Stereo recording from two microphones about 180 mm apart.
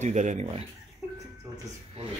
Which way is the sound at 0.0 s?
40° right (ahead or behind).